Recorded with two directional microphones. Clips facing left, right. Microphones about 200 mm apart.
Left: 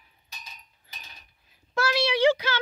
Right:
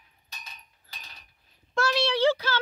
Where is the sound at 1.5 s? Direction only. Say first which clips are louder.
Even; 5° left (ahead or behind).